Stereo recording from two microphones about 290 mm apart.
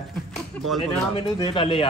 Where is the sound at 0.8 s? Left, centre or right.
Centre.